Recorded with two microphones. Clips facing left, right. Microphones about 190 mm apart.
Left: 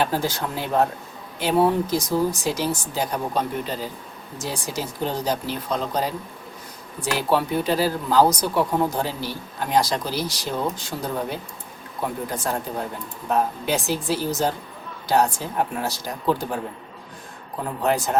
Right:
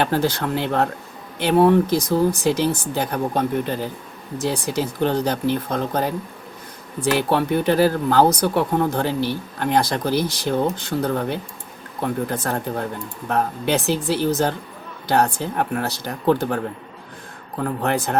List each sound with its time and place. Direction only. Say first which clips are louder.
0.0 s speech: right 3 dB; 65° right (ahead or behind)
17.6 s speech: right 1 dB; 60° right (ahead or behind)